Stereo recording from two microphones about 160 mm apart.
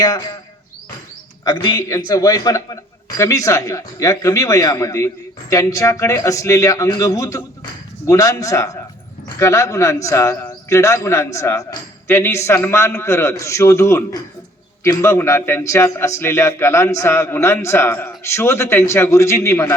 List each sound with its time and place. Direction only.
1.5 s a man's voice: 25° left (ahead or behind)